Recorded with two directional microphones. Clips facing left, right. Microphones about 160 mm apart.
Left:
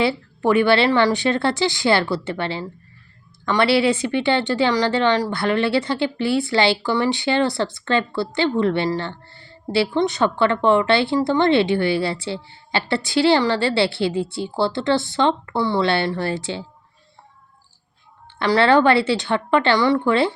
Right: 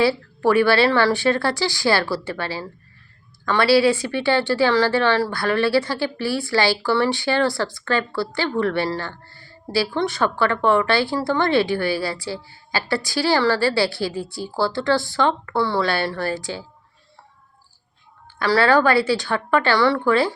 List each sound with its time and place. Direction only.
0.0 s a woman's voice: 20° left (ahead or behind)
18.3 s a woman's voice: 20° left (ahead or behind)